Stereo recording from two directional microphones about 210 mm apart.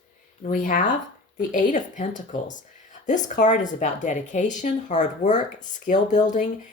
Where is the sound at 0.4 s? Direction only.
40° left (ahead or behind).